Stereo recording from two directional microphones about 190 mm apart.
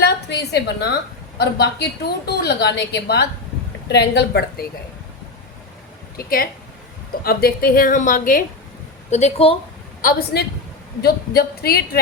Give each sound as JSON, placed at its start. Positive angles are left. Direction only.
{"t": 0.0, "sound": "a woman's voice", "side_deg": 60}
{"t": 6.1, "sound": "a woman's voice", "side_deg": 50}
{"t": 9.0, "sound": "speech", "side_deg": 35}
{"t": 10.0, "sound": "a woman's voice", "side_deg": 50}